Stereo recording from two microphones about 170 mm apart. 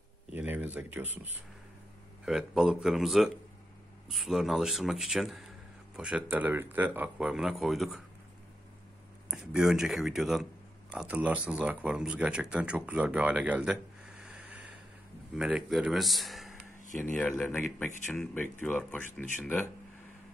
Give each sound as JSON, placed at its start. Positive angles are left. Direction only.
{"t": 0.3, "sound": "speech", "side_deg": -10}
{"t": 9.3, "sound": "speech", "side_deg": -5}